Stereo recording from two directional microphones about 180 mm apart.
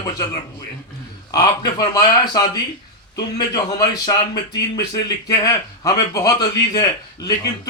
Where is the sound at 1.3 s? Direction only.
20° left (ahead or behind).